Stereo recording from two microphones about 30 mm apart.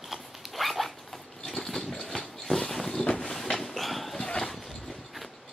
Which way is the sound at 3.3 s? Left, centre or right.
Left.